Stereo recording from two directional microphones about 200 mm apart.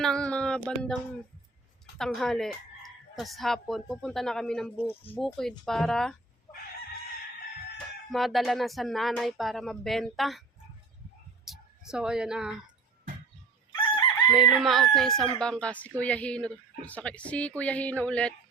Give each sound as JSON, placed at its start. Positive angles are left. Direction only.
{"t": 0.0, "sound": "speech", "side_deg": 5}
{"t": 2.0, "sound": "speech", "side_deg": 0}
{"t": 8.1, "sound": "speech", "side_deg": 0}
{"t": 11.4, "sound": "a sound", "side_deg": 0}
{"t": 13.7, "sound": "chicken", "side_deg": 25}
{"t": 14.3, "sound": "a woman's voice", "side_deg": -5}